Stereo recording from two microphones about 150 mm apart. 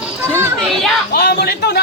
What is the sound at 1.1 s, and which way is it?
Speech, 90° left.